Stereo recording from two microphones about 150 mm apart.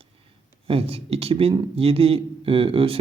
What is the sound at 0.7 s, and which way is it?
Speech, 40° right (ahead or behind).